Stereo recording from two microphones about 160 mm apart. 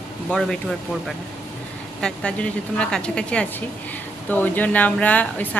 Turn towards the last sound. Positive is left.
turn(degrees=10)  # may be behind; listen again after turning